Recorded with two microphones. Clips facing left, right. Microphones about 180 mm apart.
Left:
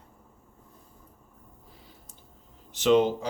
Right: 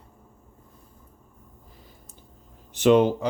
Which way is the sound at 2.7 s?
55° right (ahead or behind).